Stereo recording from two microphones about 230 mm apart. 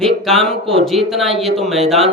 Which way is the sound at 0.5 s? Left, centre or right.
Right.